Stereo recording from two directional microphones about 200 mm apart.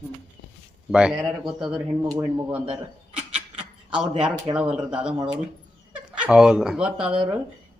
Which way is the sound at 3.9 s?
5° right (ahead or behind).